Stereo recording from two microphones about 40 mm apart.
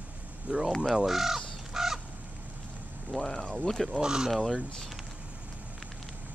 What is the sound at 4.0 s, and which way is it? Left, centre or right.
Speech, centre.